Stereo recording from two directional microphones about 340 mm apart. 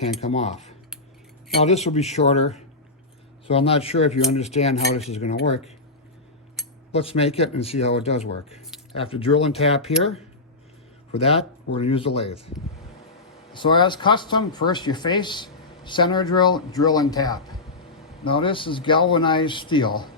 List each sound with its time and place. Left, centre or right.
0.0 s cutlery: centre
6.6 s a sound: centre
6.9 s speech: centre